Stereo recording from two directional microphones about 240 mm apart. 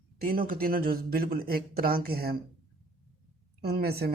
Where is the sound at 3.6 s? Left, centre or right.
Right.